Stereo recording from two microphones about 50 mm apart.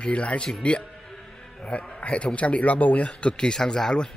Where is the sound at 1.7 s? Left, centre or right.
Left.